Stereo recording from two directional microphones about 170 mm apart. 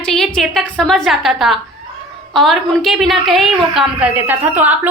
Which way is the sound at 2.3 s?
Centre (ahead or behind).